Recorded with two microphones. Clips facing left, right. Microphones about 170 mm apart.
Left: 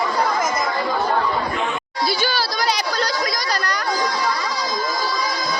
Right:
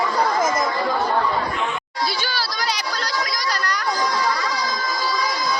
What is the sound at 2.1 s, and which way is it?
Children playing, 10° left (ahead or behind).